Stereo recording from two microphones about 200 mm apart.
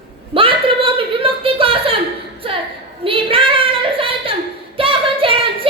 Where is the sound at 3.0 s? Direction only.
25° right (ahead or behind).